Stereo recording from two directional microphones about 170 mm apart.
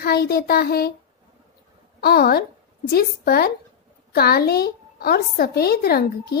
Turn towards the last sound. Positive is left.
turn(degrees=65)  # may be behind; listen again after turning